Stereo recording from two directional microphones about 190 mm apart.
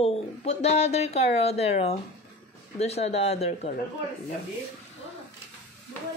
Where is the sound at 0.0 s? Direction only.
35° left (ahead or behind).